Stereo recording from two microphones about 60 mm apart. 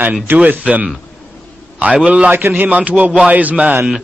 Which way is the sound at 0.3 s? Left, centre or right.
Right.